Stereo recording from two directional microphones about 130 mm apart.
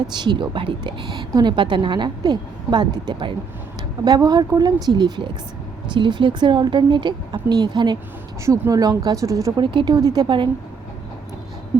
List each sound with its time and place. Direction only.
0.1 s a woman's voice: 35° right (ahead or behind)